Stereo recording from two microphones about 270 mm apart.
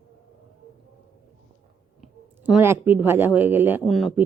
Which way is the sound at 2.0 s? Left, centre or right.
Centre.